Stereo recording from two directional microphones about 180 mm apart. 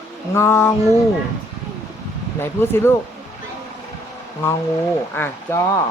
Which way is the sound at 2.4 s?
15° left (ahead or behind).